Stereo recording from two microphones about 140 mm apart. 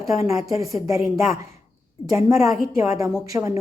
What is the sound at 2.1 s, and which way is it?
A woman's voice, 20° right (ahead or behind).